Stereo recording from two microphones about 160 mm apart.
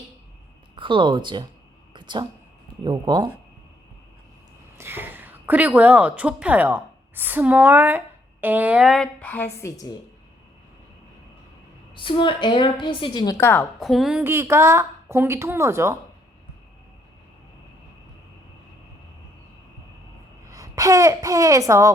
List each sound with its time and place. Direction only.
0.8 s speech: 30° right (ahead or behind)
1.9 s a sound: 30° right (ahead or behind)
2.8 s speech: 25° right (ahead or behind)
4.8 s a woman's voice: 15° right (ahead or behind); by 9.9 s 20° left (ahead or behind)
11.9 s a woman's voice: 30° left (ahead or behind); by 13.7 s 15° left (ahead or behind)
13.7 s a woman's voice: centre (ahead or behind)
14.3 s speech: 15° right (ahead or behind)
20.5 s speech: 20° right (ahead or behind)